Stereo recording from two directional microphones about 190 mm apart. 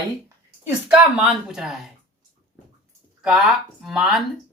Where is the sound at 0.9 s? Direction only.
5° right (ahead or behind).